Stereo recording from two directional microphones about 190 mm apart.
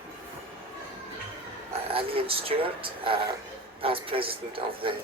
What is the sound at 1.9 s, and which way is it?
Speech, 30° right (ahead or behind).